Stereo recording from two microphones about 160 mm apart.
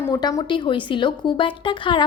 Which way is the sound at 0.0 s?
25° left (ahead or behind).